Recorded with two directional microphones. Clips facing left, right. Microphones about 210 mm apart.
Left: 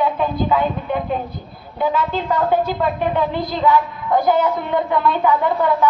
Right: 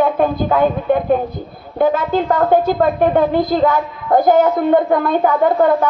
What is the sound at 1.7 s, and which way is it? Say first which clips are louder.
A woman's voice: right 5 dB; 50° right (ahead or behind).